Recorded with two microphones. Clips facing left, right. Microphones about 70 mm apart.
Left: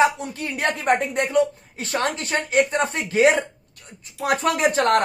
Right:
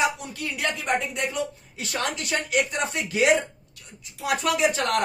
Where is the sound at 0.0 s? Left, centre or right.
Left.